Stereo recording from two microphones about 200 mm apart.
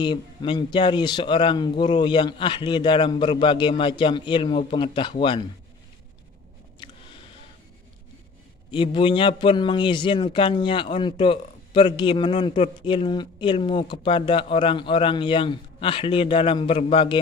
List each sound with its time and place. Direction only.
0.0 s a man's voice: 20° left (ahead or behind)
8.7 s a man's voice: 25° left (ahead or behind)